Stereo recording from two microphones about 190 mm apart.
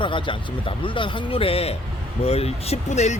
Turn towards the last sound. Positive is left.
turn(degrees=35)  # may be behind; listen again after turning